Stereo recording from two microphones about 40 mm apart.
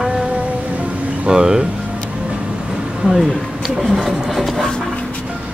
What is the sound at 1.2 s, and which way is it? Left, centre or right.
Speech, centre.